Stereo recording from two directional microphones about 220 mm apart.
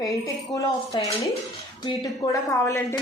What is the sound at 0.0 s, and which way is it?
Speech, 15° left (ahead or behind).